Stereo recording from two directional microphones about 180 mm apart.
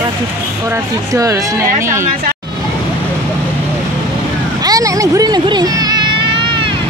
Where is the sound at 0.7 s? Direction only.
20° right (ahead or behind).